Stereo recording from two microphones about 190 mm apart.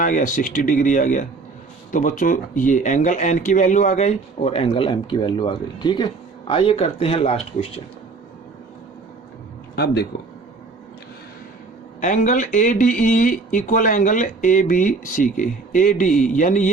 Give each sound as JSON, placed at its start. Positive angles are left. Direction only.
{"t": 0.0, "sound": "speech", "side_deg": 45}
{"t": 9.7, "sound": "speech", "side_deg": 60}
{"t": 11.9, "sound": "speech", "side_deg": 40}